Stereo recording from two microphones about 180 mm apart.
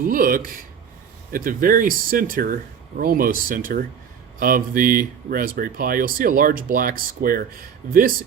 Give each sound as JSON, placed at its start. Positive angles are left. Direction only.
{"t": 0.0, "sound": "speech", "side_deg": -50}